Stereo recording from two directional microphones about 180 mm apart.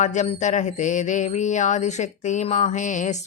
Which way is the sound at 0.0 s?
40° left (ahead or behind).